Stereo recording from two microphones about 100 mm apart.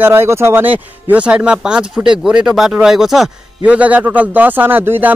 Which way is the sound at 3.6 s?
15° right (ahead or behind).